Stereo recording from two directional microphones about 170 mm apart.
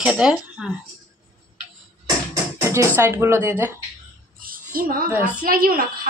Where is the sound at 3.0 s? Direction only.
15° right (ahead or behind).